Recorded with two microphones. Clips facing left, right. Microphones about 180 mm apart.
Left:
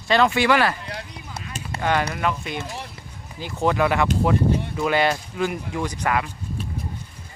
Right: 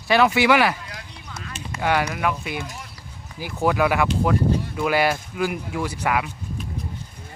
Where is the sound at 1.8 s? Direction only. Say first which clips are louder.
Right 1 dB; 10° right (ahead or behind).